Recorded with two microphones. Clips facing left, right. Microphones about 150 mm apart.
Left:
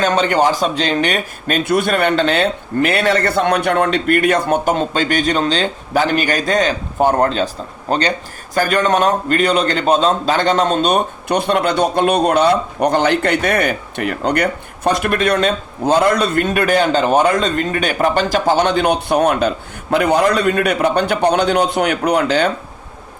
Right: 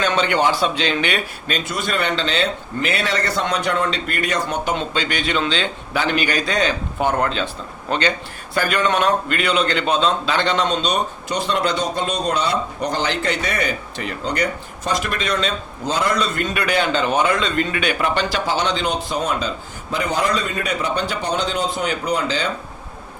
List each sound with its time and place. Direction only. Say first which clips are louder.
0.0 s a man's voice: left 4 dB; 45° left (ahead or behind); by 22.5 s 60° left (ahead or behind)